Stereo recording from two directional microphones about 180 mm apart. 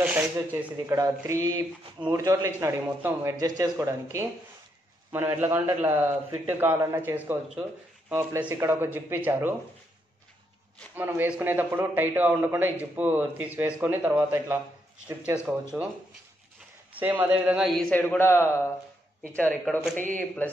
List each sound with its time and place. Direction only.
0.0 s a man's voice: 5° right (ahead or behind)
11.0 s a man's voice: 10° right (ahead or behind)
16.9 s a man's voice: 10° right (ahead or behind); by 20.5 s 10° left (ahead or behind)